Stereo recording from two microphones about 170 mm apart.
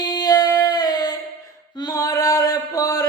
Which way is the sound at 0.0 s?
25° left (ahead or behind).